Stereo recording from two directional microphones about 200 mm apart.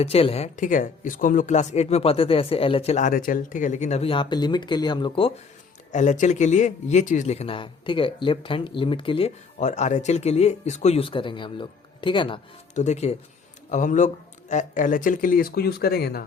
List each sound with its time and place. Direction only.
0.0 s speech: 30° left (ahead or behind)
5.9 s speech: 35° left (ahead or behind)
12.7 s speech: 35° left (ahead or behind); by 16.2 s 50° left (ahead or behind)